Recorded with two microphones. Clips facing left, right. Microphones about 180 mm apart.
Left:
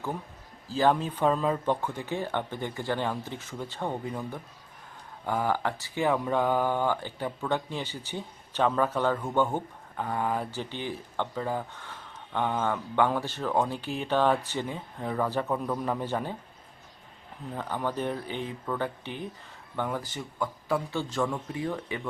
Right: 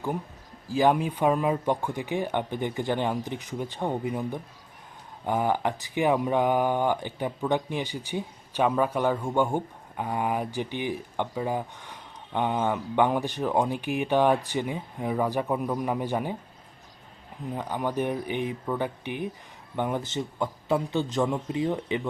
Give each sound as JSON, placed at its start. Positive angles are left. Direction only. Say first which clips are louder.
{"t": 0.7, "sound": "speech", "louder": "right 2 dB", "side_deg": -15}
{"t": 17.5, "sound": "speech", "louder": "right 2 dB", "side_deg": -15}